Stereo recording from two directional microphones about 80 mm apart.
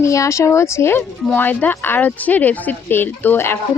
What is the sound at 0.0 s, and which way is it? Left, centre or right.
Speech, left.